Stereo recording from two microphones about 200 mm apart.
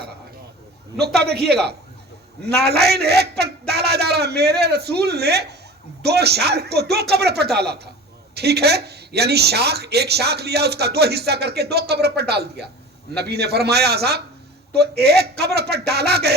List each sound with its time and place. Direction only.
0.9 s speech: 55° right (ahead or behind)
2.6 s speech: 55° right (ahead or behind)